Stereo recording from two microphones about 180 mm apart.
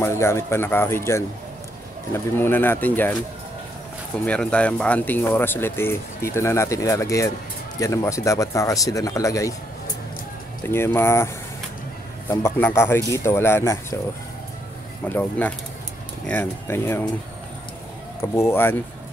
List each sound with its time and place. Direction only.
0.0 s speech: 15° left (ahead or behind)
4.2 s speech: 5° left (ahead or behind)
10.6 s speech: 15° left (ahead or behind)
12.3 s speech: 10° left (ahead or behind)
15.0 s speech: 10° left (ahead or behind)
18.3 s speech: 15° left (ahead or behind)